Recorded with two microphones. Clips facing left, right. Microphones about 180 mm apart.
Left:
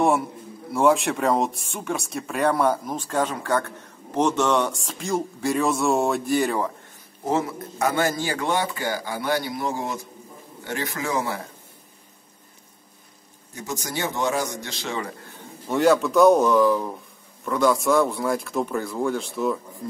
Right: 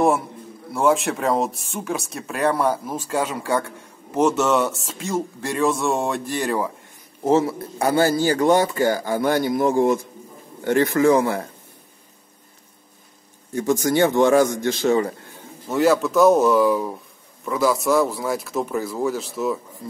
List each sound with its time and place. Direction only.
0.7 s speech: centre (ahead or behind)
7.2 s a man's voice: 30° right (ahead or behind); by 11.4 s 55° right (ahead or behind)
13.6 s a man's voice: 50° right (ahead or behind)
15.7 s speech: centre (ahead or behind)